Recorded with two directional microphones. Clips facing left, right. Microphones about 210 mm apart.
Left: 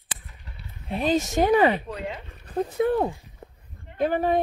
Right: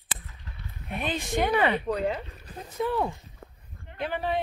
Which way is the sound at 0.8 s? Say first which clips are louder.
Left 8 dB; 35° left (ahead or behind).